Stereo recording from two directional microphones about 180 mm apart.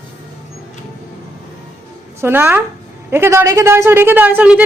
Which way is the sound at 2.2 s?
10° right (ahead or behind).